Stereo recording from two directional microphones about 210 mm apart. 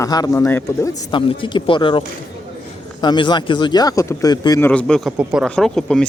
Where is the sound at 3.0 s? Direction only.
20° left (ahead or behind).